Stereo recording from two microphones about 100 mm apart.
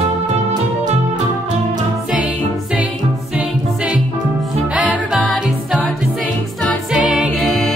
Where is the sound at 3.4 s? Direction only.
10° right (ahead or behind).